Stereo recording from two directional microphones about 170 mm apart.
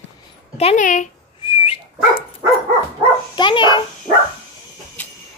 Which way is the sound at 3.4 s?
30° left (ahead or behind).